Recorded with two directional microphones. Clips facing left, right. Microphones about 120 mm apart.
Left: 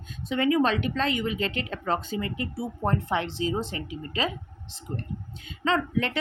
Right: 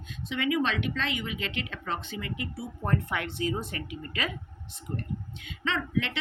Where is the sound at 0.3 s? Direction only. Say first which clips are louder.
Left 5 dB; 40° left (ahead or behind).